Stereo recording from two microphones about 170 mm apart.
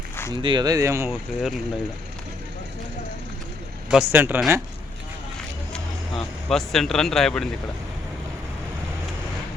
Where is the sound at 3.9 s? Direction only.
10° right (ahead or behind).